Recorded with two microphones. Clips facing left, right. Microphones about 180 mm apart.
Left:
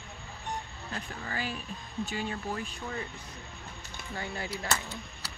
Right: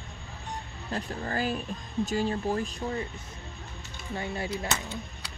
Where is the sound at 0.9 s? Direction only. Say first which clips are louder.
Right 6 dB; 40° right (ahead or behind).